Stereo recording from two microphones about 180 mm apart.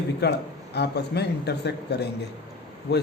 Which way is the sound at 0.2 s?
65° left (ahead or behind).